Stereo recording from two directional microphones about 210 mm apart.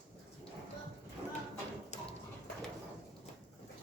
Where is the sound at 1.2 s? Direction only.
20° right (ahead or behind).